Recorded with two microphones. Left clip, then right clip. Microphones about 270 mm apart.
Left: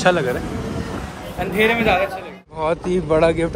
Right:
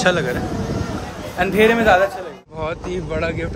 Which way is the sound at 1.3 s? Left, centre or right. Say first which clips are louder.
Right 3 dB; right.